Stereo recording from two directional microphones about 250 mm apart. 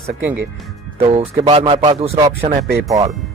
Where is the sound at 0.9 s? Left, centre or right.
Right.